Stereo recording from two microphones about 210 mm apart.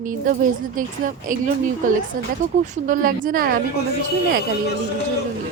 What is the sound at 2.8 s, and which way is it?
Speech, 40° right (ahead or behind).